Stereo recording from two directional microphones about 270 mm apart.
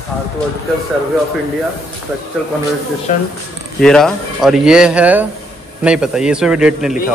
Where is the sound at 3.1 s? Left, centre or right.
Left.